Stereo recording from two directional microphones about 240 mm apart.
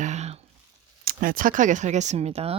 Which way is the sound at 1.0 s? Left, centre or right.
Right.